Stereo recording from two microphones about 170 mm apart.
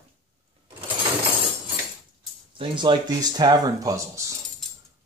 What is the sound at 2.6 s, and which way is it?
Speech, 30° right (ahead or behind).